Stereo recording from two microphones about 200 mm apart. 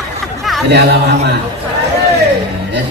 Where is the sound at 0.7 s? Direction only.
55° right (ahead or behind).